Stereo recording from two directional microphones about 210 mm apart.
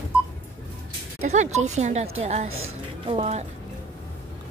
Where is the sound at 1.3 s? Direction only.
35° right (ahead or behind).